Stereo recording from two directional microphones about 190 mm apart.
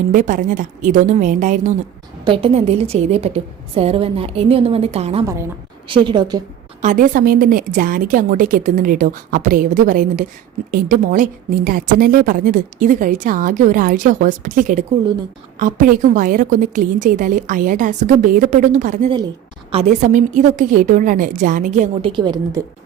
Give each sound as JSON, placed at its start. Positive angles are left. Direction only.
{"t": 0.1, "sound": "a woman's voice", "side_deg": -45}
{"t": 2.2, "sound": "a woman's voice", "side_deg": -30}
{"t": 5.2, "sound": "a woman's voice", "side_deg": -15}
{"t": 6.8, "sound": "a woman's voice", "side_deg": -45}
{"t": 22.1, "sound": "a woman's voice", "side_deg": -20}